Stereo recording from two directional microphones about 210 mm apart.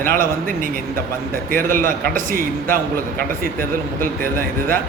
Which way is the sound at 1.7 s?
40° right (ahead or behind).